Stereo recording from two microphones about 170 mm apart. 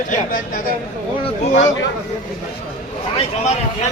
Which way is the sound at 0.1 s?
55° left (ahead or behind).